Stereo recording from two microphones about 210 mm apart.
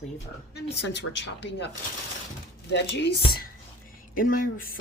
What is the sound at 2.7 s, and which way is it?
Speech, 55° left (ahead or behind).